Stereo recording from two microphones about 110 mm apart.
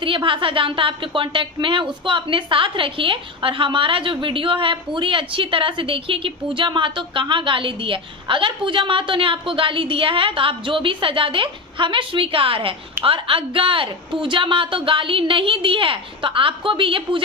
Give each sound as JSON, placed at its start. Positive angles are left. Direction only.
{"t": 0.0, "sound": "a woman's voice", "side_deg": -50}